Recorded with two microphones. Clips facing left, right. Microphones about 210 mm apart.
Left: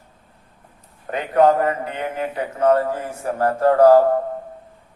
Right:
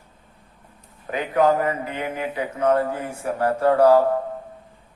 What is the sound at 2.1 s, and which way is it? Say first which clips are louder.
A man's voice: left 2 dB; 50° left (ahead or behind).